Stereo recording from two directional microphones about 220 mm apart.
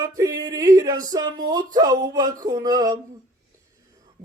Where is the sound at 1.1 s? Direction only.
15° right (ahead or behind).